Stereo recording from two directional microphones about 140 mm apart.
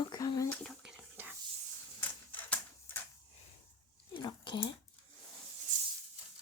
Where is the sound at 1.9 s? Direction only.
15° left (ahead or behind).